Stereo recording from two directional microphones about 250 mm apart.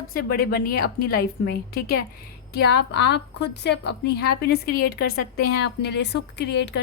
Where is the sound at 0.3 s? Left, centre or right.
Left.